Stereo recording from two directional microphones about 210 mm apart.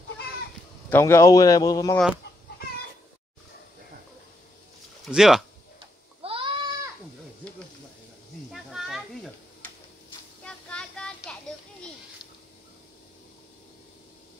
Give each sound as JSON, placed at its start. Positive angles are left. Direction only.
{"t": 0.8, "sound": "a man's voice", "side_deg": 10}
{"t": 5.0, "sound": "speech", "side_deg": 0}
{"t": 5.8, "sound": "sheep", "side_deg": -25}
{"t": 8.5, "sound": "a sound", "side_deg": 0}
{"t": 10.4, "sound": "child singing", "side_deg": 5}